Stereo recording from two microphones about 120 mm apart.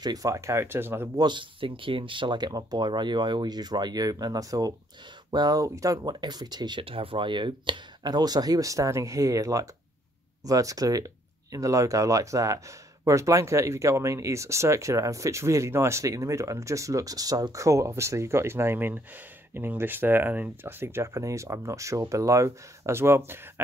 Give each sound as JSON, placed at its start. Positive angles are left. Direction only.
{"t": 0.0, "sound": "speech", "side_deg": -30}
{"t": 1.1, "sound": "speech", "side_deg": -40}
{"t": 6.8, "sound": "speech", "side_deg": -50}